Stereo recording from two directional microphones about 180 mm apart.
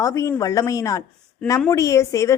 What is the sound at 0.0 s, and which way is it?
A woman's voice, 20° left (ahead or behind).